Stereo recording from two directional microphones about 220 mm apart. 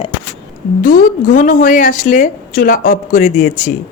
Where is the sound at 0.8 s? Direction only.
40° left (ahead or behind).